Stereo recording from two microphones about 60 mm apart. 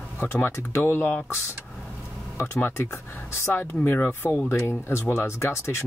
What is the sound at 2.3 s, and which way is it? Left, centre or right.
Speech, left.